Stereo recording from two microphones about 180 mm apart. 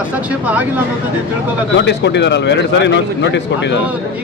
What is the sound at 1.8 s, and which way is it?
Speech, 75° left (ahead or behind).